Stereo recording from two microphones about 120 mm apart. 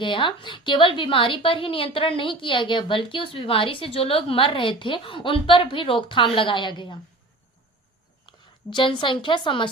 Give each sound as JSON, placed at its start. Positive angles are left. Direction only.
{"t": 0.0, "sound": "a woman's voice", "side_deg": 45}
{"t": 8.3, "sound": "a woman's voice", "side_deg": 40}